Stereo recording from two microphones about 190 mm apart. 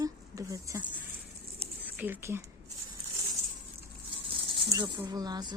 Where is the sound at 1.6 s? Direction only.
10° right (ahead or behind).